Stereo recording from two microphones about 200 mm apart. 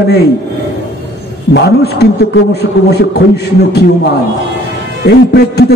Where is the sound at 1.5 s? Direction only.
55° left (ahead or behind).